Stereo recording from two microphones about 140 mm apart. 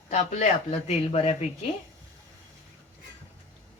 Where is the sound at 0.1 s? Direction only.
60° left (ahead or behind).